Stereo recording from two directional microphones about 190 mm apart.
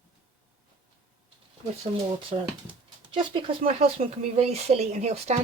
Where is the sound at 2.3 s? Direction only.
40° right (ahead or behind).